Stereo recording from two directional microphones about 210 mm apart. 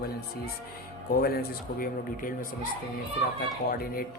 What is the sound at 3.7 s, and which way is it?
Speech, 45° left (ahead or behind).